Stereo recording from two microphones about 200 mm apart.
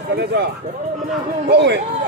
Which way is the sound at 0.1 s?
55° right (ahead or behind).